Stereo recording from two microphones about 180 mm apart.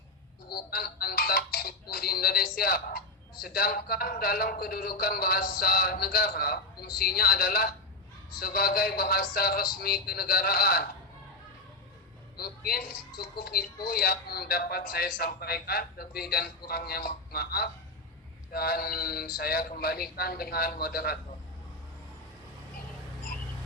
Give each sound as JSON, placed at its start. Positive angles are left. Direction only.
{"t": 0.4, "sound": "speech", "side_deg": 60}
{"t": 12.4, "sound": "speech", "side_deg": 60}